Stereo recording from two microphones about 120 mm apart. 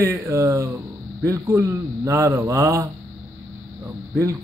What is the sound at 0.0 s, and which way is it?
Speech, 20° right (ahead or behind).